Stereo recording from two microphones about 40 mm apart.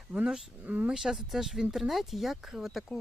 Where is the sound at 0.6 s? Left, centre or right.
Right.